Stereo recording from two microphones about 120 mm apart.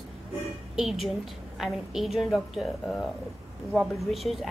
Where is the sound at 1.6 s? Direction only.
5° right (ahead or behind).